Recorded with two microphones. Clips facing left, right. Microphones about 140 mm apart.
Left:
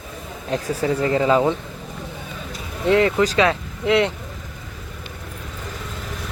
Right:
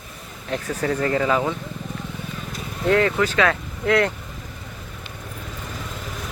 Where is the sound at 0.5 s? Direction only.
25° left (ahead or behind).